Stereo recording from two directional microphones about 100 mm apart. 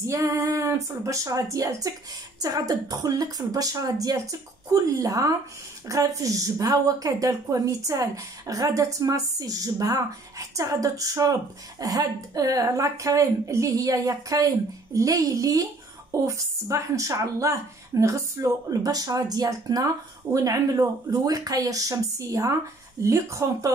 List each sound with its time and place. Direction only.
0.0 s a woman's voice: 30° right (ahead or behind)